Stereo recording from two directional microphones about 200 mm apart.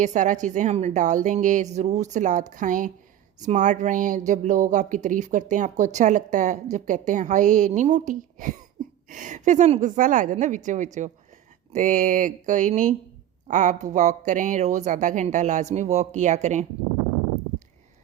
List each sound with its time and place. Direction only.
0.0 s speech: 40° right (ahead or behind)